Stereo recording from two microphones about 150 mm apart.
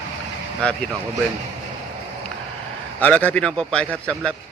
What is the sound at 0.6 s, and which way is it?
Speech, 5° left (ahead or behind).